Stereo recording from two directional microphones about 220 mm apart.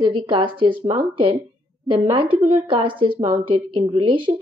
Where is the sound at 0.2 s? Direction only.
25° right (ahead or behind).